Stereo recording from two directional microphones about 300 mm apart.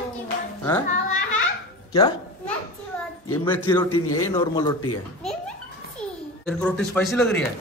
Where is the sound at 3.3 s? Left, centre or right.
Centre.